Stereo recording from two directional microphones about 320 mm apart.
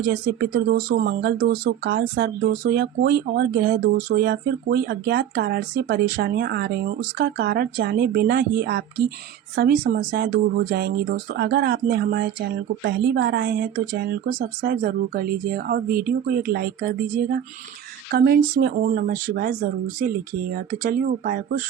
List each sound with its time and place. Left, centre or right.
0.0 s speech: right